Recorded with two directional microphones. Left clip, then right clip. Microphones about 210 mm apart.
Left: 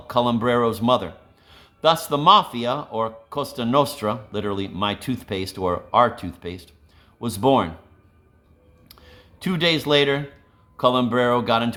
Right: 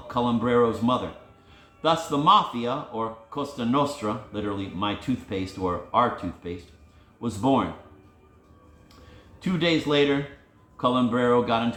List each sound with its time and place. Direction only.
0.1 s speech: 55° left (ahead or behind)
9.4 s speech: 55° left (ahead or behind)